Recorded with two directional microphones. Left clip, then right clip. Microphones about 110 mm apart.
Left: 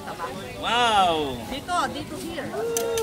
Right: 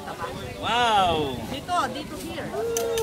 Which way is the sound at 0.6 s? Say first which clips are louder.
Left 1 dB; 30° left (ahead or behind).